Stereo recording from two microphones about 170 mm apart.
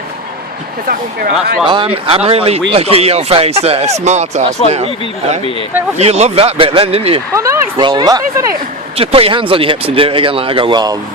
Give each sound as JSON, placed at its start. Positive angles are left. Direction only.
{"t": 0.9, "sound": "speech", "side_deg": -60}
{"t": 1.6, "sound": "speech", "side_deg": -30}
{"t": 6.0, "sound": "speech", "side_deg": -40}
{"t": 7.3, "sound": "speech", "side_deg": -15}
{"t": 9.0, "sound": "speech", "side_deg": -35}